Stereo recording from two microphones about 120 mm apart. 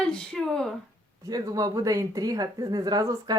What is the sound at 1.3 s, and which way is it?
A woman's voice, 30° right (ahead or behind).